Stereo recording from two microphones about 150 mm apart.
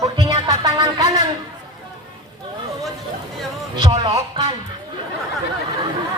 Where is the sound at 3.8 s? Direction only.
30° right (ahead or behind).